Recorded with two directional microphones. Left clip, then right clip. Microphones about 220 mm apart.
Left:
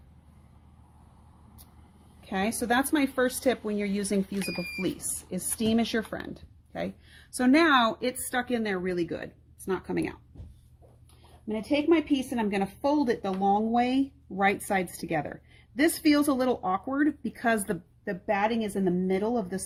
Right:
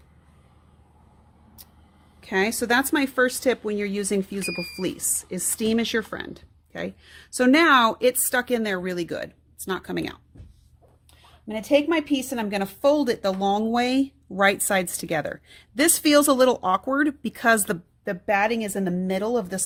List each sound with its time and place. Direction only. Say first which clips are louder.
2.2 s speech: right 6 dB; 35° right (ahead or behind); by 10.2 s 50° right (ahead or behind)
11.4 s a woman's voice: right 5 dB; 55° right (ahead or behind)